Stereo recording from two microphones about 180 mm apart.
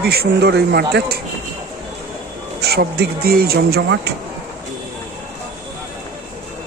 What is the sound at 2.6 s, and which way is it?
Speech, 60° right (ahead or behind).